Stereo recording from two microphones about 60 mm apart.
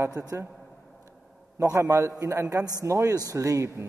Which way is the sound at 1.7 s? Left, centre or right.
Right.